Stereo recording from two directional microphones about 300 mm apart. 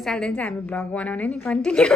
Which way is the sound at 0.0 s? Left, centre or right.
Centre.